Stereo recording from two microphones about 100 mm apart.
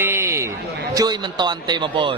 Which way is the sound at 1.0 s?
45° right (ahead or behind).